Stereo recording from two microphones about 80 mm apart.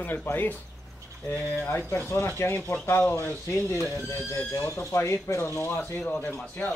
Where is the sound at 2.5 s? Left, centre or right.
Centre; by 5.8 s left.